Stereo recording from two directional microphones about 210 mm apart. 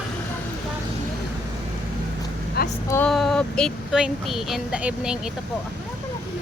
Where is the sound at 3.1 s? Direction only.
Centre (ahead or behind).